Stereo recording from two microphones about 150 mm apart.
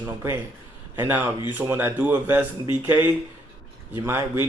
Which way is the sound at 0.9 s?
10° right (ahead or behind).